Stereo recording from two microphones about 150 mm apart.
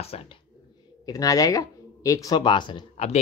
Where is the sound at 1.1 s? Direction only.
25° left (ahead or behind).